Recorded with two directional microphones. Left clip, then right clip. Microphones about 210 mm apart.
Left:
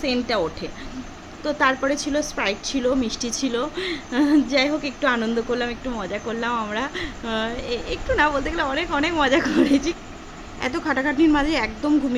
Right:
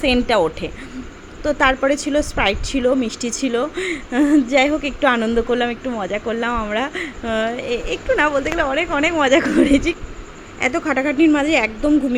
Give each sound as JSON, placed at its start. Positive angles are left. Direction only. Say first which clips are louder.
{"t": 0.0, "sound": "a woman's voice", "louder": "right 7 dB", "side_deg": -25}